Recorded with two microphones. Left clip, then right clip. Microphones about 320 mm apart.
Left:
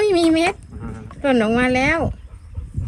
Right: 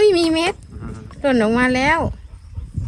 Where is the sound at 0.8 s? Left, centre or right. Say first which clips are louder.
Left 1 dB; centre.